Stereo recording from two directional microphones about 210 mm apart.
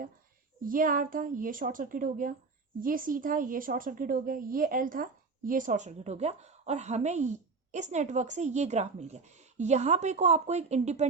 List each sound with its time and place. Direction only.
0.6 s a woman's voice: 40° right (ahead or behind)